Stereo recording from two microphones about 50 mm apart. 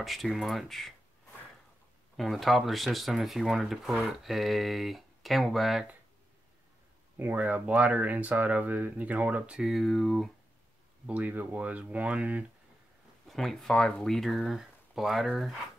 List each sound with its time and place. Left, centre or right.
0.0 s speech: centre
2.1 s speech: centre
7.3 s speech: right
9.6 s speech: centre
11.1 s speech: right
13.3 s speech: centre